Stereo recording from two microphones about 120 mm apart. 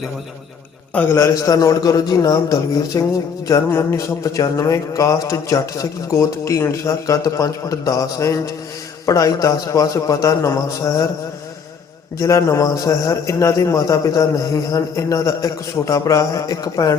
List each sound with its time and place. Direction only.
0.9 s a man's voice: 25° left (ahead or behind)
12.2 s a man's voice: 25° left (ahead or behind)